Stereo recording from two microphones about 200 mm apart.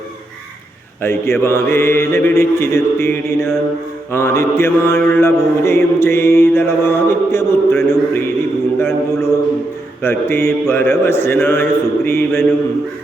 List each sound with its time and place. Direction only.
1.0 s mantra: 10° left (ahead or behind)